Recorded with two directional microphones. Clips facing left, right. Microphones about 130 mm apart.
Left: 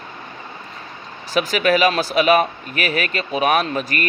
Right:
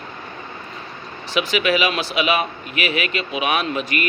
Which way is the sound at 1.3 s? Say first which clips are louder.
Left 2 dB; 40° left (ahead or behind).